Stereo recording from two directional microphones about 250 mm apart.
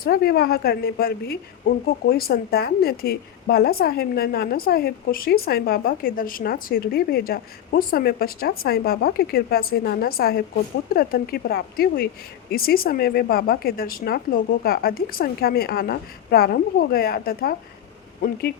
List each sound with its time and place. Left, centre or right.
0.0 s a woman's voice: left